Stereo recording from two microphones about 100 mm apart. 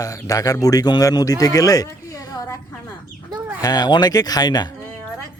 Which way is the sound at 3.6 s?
40° left (ahead or behind).